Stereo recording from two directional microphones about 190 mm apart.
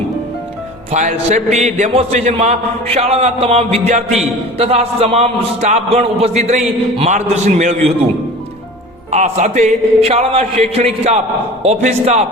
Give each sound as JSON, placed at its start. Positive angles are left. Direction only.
{"t": 0.9, "sound": "a man's voice", "side_deg": -40}
{"t": 9.1, "sound": "a man's voice", "side_deg": -35}